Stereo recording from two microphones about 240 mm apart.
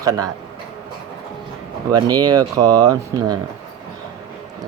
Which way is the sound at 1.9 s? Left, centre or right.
Centre.